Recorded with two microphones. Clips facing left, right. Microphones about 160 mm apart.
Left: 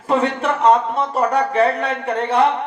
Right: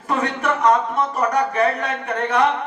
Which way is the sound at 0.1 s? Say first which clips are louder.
Left 3 dB; 30° left (ahead or behind).